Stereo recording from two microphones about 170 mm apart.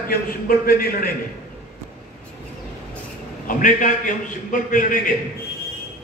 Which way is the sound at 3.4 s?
50° left (ahead or behind).